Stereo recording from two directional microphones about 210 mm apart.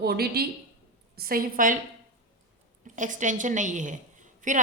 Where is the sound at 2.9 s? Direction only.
35° right (ahead or behind).